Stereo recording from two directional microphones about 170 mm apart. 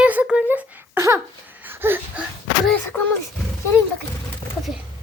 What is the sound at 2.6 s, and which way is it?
Speech, 10° left (ahead or behind).